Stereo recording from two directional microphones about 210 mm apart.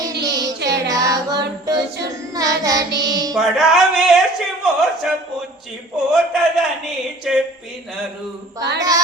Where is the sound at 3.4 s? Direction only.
Centre (ahead or behind).